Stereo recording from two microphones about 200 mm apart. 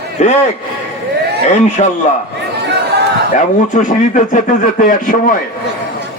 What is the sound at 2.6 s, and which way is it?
Chatter, 55° right (ahead or behind).